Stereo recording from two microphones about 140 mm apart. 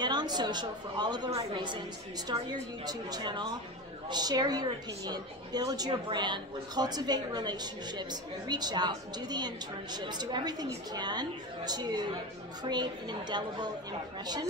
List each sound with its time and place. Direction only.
0.0 s a woman's voice: 30° right (ahead or behind)